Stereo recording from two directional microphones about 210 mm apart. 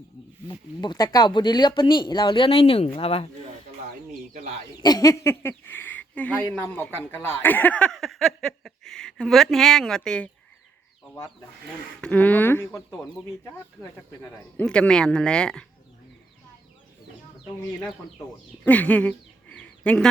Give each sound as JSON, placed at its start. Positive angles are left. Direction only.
{"t": 0.4, "sound": "speech", "side_deg": 20}
{"t": 4.8, "sound": "speech", "side_deg": 20}
{"t": 11.9, "sound": "speech", "side_deg": 5}
{"t": 18.6, "sound": "speech", "side_deg": 5}